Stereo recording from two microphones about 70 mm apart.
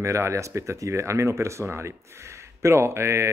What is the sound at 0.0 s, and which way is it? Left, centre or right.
Speech, right.